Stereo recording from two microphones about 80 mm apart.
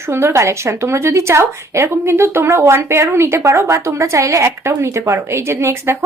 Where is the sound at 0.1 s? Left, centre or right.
Right.